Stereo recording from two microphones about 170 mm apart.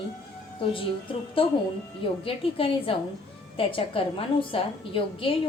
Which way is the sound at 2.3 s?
35° left (ahead or behind).